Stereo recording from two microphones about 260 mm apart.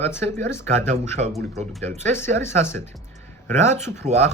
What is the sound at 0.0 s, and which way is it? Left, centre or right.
Speech, centre.